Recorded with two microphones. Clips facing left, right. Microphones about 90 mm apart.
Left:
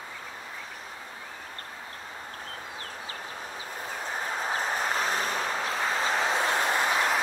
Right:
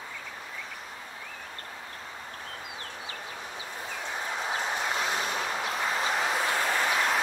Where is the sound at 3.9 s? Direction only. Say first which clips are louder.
Left 2 dB; 40° left (ahead or behind); by 7.0 s 25° left (ahead or behind).